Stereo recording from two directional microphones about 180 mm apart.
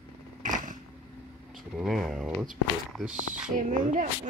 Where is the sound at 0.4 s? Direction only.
45° right (ahead or behind).